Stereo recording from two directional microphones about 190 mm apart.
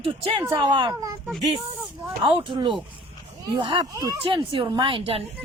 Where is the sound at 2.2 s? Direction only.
25° right (ahead or behind).